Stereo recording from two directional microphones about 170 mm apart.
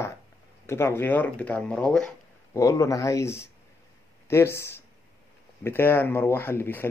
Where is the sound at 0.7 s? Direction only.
15° left (ahead or behind).